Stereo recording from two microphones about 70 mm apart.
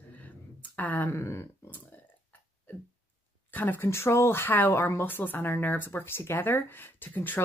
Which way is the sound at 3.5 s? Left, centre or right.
Left.